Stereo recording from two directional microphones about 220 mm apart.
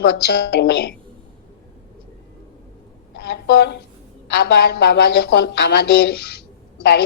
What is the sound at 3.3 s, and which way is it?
Speech, 50° left (ahead or behind).